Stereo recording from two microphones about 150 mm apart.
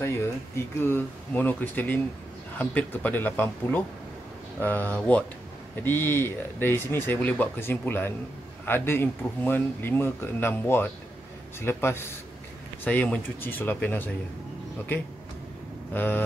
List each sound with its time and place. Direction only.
0.0 s speech: 15° left (ahead or behind)
15.9 s speech: 10° left (ahead or behind)